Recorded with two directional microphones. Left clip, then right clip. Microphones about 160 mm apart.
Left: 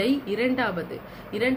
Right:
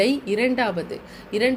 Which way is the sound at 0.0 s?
45° right (ahead or behind).